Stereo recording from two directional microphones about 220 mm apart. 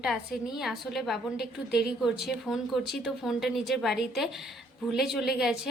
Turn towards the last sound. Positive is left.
turn(degrees=0)  # may be behind; listen again after turning